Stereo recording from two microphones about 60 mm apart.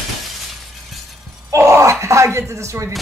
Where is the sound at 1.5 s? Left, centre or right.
Right.